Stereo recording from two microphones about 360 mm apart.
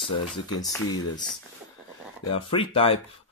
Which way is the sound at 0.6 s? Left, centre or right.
Centre.